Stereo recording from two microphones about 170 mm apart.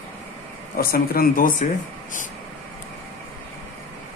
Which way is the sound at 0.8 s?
60° left (ahead or behind).